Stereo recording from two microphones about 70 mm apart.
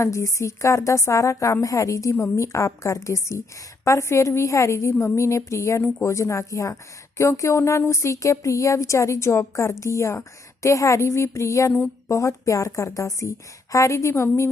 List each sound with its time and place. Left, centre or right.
0.0 s speech: left